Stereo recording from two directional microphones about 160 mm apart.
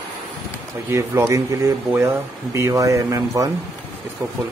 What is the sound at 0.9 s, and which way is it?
Speech, 20° right (ahead or behind).